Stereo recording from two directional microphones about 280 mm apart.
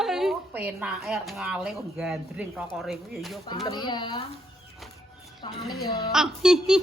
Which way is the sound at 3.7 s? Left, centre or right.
Centre.